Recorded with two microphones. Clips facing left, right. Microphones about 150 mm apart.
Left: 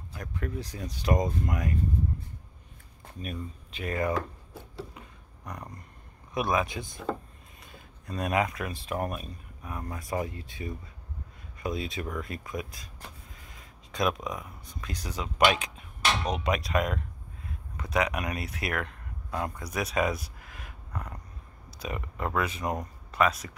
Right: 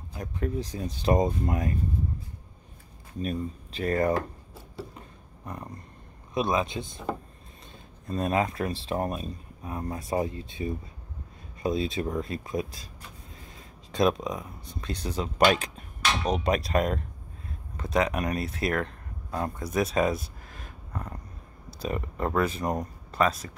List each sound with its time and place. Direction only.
0.1 s speech: 25° right (ahead or behind)
3.2 s speech: 35° right (ahead or behind)
6.3 s speech: 25° right (ahead or behind)